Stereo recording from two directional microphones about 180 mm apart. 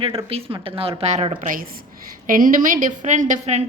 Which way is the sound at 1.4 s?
50° right (ahead or behind).